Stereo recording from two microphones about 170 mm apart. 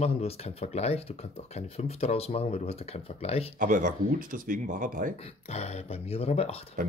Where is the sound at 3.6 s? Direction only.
50° right (ahead or behind).